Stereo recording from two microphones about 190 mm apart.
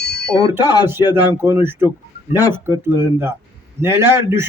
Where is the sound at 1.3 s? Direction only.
15° right (ahead or behind).